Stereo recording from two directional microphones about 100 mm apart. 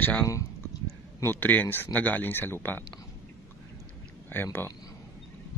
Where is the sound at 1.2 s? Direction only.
20° left (ahead or behind).